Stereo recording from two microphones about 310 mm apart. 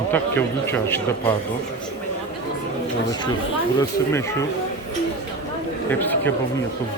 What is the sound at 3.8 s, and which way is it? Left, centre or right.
Speech, centre.